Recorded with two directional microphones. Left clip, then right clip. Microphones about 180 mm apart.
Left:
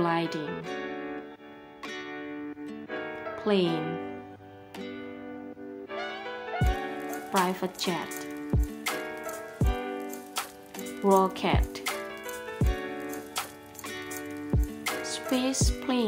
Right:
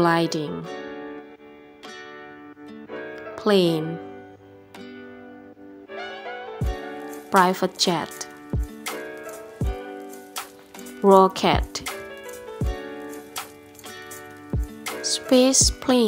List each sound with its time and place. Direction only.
0.0 s speech: 40° right (ahead or behind)
0.7 s music: centre (ahead or behind)
2.9 s music: 5° left (ahead or behind)
3.3 s speech: 40° right (ahead or behind)
5.9 s music: centre (ahead or behind)
7.4 s speech: 35° right (ahead or behind)
8.5 s music: centre (ahead or behind)
11.1 s speech: 35° right (ahead or behind)
11.8 s music: centre (ahead or behind)
15.2 s music: 35° right (ahead or behind)